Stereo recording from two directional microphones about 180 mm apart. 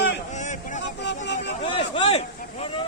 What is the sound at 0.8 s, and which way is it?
Music, 80° left.